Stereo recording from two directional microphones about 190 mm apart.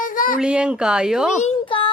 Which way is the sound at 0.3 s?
5° right (ahead or behind).